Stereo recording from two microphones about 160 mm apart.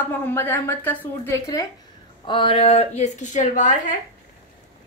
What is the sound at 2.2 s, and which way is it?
A woman's voice, 30° left (ahead or behind).